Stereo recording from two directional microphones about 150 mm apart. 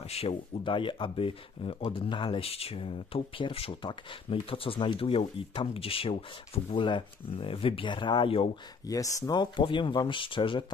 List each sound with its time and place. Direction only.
0.0 s speech: 45° left (ahead or behind)
8.8 s speech: 20° left (ahead or behind)